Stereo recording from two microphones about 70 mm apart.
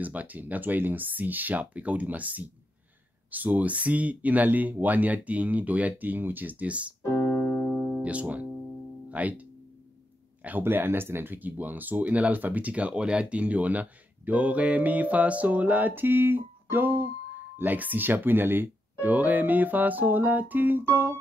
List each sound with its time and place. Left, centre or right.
0.0 s speech: right
7.0 s keyboard: left
7.8 s music: centre
9.1 s speech: right
10.4 s speech: right
20.9 s keyboard: right